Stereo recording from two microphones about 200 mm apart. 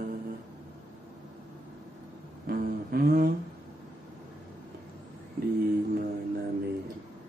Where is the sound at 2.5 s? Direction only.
50° right (ahead or behind).